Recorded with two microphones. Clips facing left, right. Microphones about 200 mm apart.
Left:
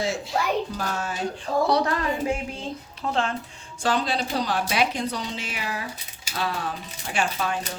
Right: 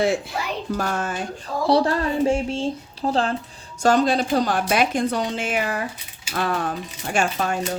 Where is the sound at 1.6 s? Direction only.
30° right (ahead or behind).